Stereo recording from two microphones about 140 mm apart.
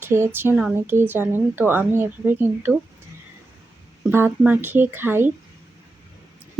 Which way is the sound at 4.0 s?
15° right (ahead or behind).